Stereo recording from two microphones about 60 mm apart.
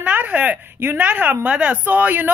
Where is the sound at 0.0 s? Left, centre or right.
Right.